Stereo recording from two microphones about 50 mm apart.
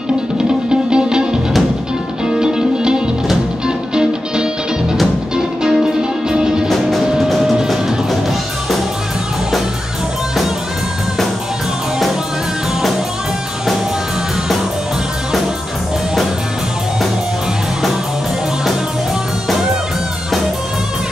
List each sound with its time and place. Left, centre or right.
0.7 s music: centre
6.2 s music: centre
6.7 s music: centre